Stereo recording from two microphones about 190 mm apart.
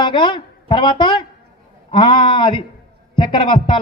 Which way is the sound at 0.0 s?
25° left (ahead or behind).